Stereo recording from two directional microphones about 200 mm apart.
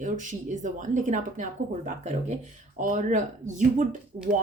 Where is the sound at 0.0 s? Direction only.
40° right (ahead or behind).